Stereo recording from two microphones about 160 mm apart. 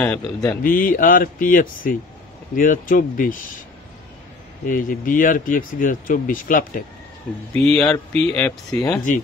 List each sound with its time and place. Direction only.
0.0 s a man's voice: 10° left (ahead or behind)
0.6 s speech: 60° left (ahead or behind)
4.6 s speech: 60° left (ahead or behind)
7.5 s speech: 5° left (ahead or behind)